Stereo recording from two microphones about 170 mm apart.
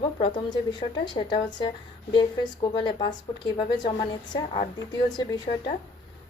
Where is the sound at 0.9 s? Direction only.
25° left (ahead or behind).